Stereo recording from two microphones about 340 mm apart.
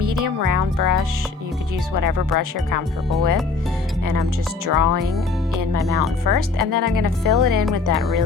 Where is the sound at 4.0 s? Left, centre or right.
Right.